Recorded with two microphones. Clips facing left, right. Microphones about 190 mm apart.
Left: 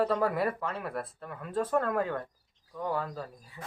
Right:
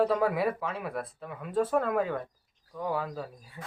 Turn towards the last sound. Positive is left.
turn(degrees=-5)  # may be behind; listen again after turning